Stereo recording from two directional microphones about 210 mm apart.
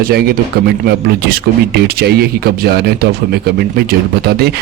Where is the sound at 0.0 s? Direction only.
45° right (ahead or behind).